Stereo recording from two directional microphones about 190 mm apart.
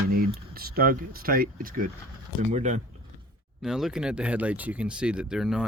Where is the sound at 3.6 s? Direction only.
Centre (ahead or behind).